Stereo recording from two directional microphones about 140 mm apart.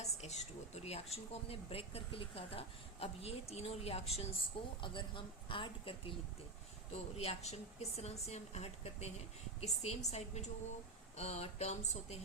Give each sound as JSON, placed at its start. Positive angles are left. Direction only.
{"t": 0.0, "sound": "a sound", "side_deg": 55}
{"t": 1.1, "sound": "speech", "side_deg": 45}
{"t": 4.8, "sound": "speech", "side_deg": 35}
{"t": 6.9, "sound": "speech", "side_deg": 50}